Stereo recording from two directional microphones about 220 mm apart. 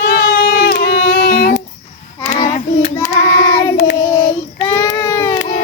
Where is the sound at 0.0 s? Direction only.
40° left (ahead or behind).